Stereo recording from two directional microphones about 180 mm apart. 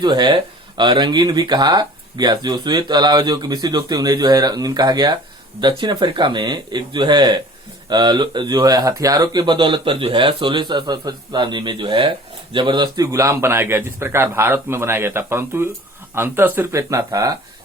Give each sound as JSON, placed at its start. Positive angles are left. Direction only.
{"t": 0.0, "sound": "a man's voice", "side_deg": -25}